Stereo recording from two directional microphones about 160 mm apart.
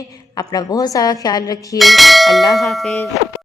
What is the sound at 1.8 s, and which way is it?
Speech, centre (ahead or behind).